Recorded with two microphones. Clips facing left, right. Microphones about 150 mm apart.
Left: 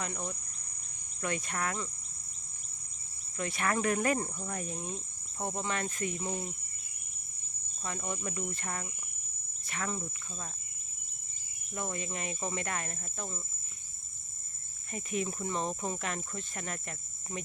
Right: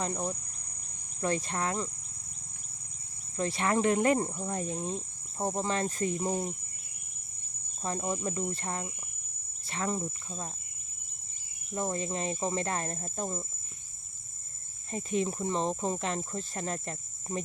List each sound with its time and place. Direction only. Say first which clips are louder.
0.0 s cricket: right 5 dB; 35° right (ahead or behind)
3.3 s cricket: right 4 dB; 30° right (ahead or behind)
7.8 s cricket: right 5 dB; 35° right (ahead or behind)
9.6 s speech: right 5 dB; 30° right (ahead or behind)
11.7 s cricket: right 5 dB; 30° right (ahead or behind)
14.9 s speech: right 4 dB; 30° right (ahead or behind)